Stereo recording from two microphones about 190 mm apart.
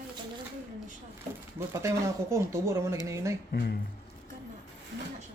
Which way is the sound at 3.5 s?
55° left (ahead or behind).